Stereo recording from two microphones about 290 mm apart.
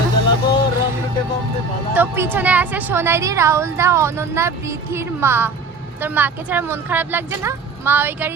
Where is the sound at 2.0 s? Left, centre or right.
Centre.